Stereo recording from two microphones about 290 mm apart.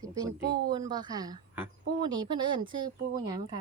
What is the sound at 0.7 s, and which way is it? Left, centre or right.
Speech, centre.